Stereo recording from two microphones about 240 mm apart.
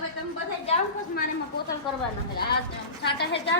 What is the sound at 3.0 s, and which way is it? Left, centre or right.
Speech, left.